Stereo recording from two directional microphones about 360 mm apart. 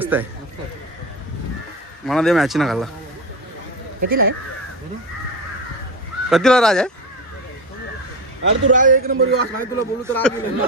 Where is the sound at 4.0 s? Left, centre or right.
Right.